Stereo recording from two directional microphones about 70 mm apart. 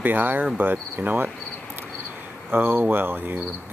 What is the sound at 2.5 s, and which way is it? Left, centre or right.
Speech, right.